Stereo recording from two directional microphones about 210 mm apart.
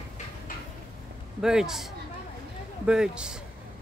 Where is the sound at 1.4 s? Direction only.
Centre (ahead or behind).